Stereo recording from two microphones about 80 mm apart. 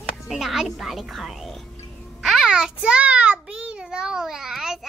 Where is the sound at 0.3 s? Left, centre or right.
Centre.